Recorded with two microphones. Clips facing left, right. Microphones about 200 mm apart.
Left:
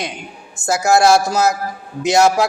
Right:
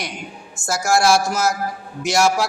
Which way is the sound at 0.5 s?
20° left (ahead or behind).